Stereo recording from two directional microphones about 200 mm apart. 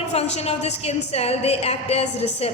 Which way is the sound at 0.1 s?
30° left (ahead or behind).